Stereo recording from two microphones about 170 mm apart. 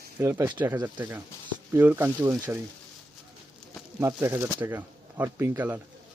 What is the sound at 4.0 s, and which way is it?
Speech, 15° right (ahead or behind).